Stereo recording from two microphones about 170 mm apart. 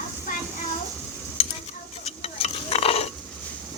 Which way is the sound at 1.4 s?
35° left (ahead or behind).